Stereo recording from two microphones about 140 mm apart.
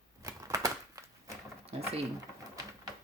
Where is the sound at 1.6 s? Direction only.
45° right (ahead or behind).